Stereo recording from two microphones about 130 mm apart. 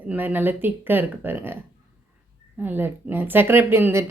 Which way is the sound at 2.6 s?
15° right (ahead or behind).